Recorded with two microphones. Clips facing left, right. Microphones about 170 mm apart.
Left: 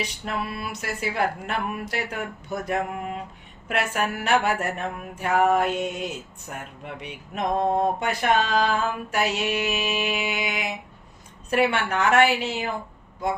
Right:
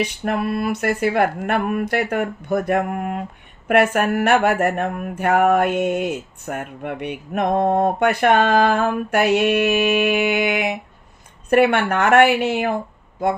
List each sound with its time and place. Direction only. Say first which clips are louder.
0.0 s mantra: right 8 dB; 55° right (ahead or behind)